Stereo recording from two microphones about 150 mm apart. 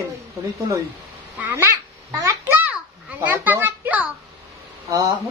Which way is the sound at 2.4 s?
10° right (ahead or behind).